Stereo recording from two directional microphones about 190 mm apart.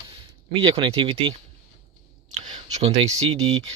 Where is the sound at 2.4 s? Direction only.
30° right (ahead or behind).